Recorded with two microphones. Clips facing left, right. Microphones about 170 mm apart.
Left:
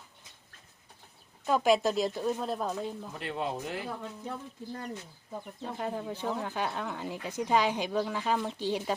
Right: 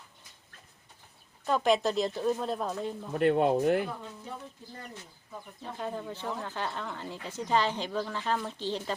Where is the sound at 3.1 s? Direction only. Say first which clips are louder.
Right 14 dB; 55° right (ahead or behind).